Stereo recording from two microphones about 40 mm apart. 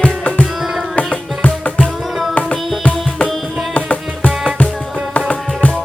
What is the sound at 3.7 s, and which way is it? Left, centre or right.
Music, left.